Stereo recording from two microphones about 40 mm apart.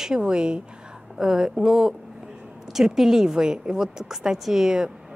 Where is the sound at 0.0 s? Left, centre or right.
Right.